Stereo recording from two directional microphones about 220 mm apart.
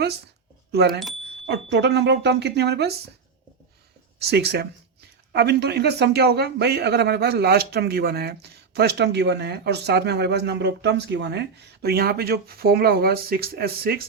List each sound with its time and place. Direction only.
0.7 s a man's voice: 45° right (ahead or behind)
4.2 s a man's voice: 45° right (ahead or behind)